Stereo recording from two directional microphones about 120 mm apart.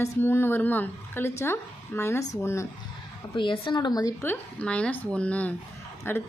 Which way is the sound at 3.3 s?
45° left (ahead or behind).